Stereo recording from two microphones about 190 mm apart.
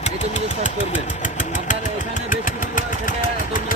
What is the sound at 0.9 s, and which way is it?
Vehicle, 40° left (ahead or behind).